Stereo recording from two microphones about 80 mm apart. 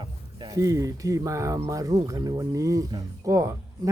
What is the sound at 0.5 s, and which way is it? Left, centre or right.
Speech, right.